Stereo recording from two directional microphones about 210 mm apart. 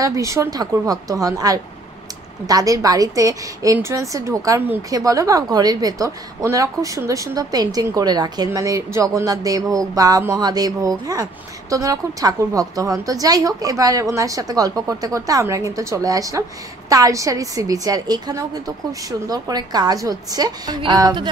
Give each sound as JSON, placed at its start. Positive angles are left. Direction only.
{"t": 0.0, "sound": "a woman's voice", "side_deg": -15}